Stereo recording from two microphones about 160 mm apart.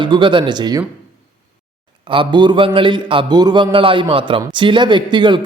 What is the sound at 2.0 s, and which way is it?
Speech, 30° right (ahead or behind).